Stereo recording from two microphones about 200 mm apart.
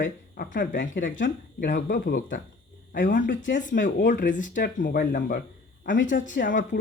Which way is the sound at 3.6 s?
40° left (ahead or behind).